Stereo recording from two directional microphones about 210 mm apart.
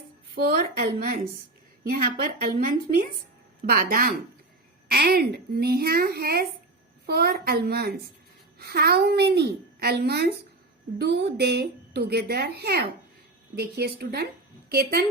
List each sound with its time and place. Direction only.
0.4 s a woman's voice: 45° right (ahead or behind)